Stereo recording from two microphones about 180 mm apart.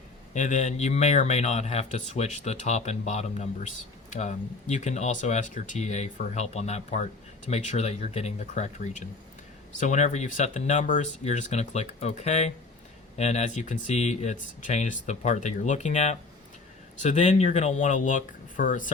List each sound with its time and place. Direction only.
0.3 s speech: 40° left (ahead or behind)